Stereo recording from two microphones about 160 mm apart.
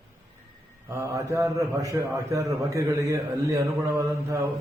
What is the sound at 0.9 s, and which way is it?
A man's voice, 20° right (ahead or behind).